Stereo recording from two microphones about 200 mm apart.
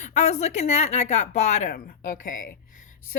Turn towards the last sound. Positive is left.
turn(degrees=40)  # may be behind; listen again after turning